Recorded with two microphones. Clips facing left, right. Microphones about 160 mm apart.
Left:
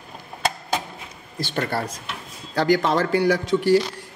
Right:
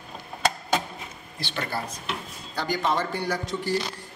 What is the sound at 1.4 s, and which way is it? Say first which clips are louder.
Speech: left 6 dB; 45° left (ahead or behind).